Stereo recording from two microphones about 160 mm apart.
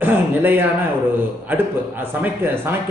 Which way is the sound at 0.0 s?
10° right (ahead or behind).